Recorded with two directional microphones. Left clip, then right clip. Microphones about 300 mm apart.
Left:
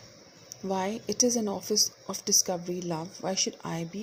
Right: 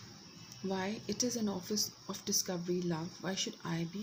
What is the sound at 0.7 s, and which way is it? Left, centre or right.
Speech, left.